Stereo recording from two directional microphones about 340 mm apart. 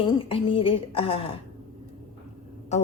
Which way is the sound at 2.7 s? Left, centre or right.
Centre.